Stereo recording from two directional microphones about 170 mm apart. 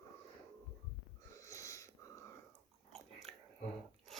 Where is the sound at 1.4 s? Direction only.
20° left (ahead or behind).